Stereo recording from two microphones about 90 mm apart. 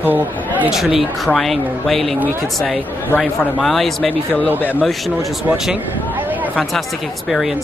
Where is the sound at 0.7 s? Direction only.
5° right (ahead or behind).